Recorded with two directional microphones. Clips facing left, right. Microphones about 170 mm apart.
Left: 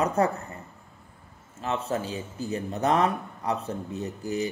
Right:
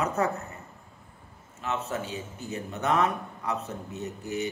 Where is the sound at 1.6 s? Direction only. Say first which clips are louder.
Left 3 dB; 35° left (ahead or behind).